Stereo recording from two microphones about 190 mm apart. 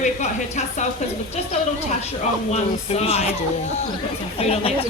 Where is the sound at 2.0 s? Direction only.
35° left (ahead or behind).